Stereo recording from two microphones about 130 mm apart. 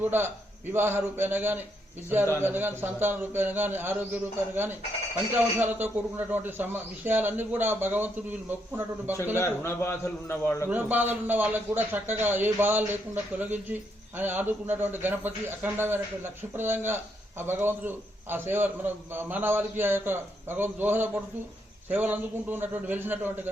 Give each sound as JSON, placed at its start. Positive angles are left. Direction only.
{"t": 0.0, "sound": "a man's voice", "side_deg": -15}
{"t": 9.4, "sound": "a man's voice", "side_deg": 20}
{"t": 10.7, "sound": "a man's voice", "side_deg": -15}